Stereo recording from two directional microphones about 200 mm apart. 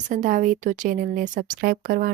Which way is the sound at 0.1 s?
40° right (ahead or behind).